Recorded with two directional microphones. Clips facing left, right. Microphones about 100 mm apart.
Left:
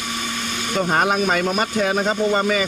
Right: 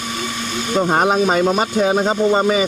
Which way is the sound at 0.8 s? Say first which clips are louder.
Right 3 dB; 20° right (ahead or behind).